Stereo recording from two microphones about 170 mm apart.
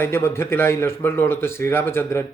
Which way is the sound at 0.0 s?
15° left (ahead or behind).